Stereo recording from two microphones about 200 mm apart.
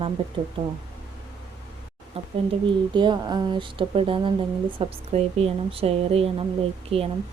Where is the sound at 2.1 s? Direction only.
30° right (ahead or behind).